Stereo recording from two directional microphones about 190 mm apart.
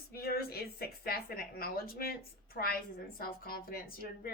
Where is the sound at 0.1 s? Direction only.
50° left (ahead or behind).